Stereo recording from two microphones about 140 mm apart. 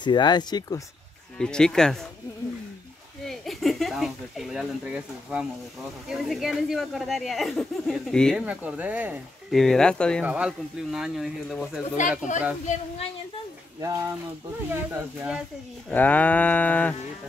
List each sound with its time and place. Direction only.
0.0 s speech: 30° left (ahead or behind)
1.4 s speech: 5° left (ahead or behind)
3.3 s speech: centre (ahead or behind)
8.4 s speech: 10° right (ahead or behind)
9.5 s speech: centre (ahead or behind)
10.2 s speech: 10° right (ahead or behind)
12.3 s speech: 60° left (ahead or behind)
13.7 s speech: 25° right (ahead or behind)
15.9 s livestock: 10° left (ahead or behind)